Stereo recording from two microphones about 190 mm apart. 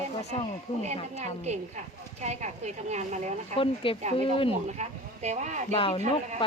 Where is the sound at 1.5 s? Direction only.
35° right (ahead or behind).